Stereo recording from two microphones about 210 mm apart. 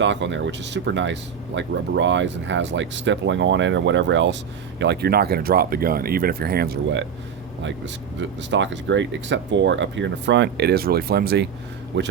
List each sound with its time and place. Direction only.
0.0 s speech: 60° right (ahead or behind)
8.2 s speech: 60° right (ahead or behind)